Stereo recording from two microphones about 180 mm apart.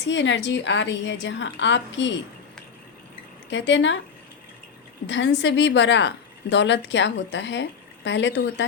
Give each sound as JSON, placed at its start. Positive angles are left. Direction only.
{"t": 0.0, "sound": "a woman's voice", "side_deg": 90}
{"t": 3.5, "sound": "a woman's voice", "side_deg": 85}
{"t": 5.0, "sound": "a woman's voice", "side_deg": 85}